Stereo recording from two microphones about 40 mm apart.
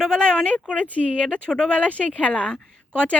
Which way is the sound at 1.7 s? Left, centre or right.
Left.